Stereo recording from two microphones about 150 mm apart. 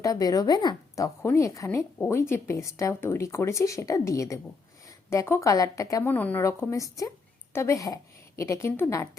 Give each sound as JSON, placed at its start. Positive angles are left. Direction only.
{"t": 0.0, "sound": "speech", "side_deg": 25}